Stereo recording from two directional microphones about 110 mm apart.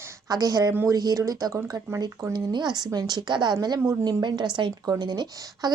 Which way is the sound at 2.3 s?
40° right (ahead or behind).